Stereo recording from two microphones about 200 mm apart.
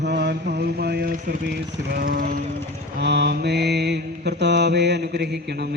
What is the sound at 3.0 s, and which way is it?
Mantra, 55° right (ahead or behind).